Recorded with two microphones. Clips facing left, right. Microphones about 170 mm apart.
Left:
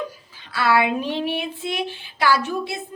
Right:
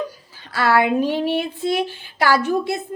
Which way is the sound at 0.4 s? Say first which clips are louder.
Right 2 dB; 45° right (ahead or behind).